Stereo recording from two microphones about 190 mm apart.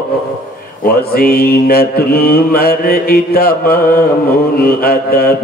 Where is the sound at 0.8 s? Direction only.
50° left (ahead or behind).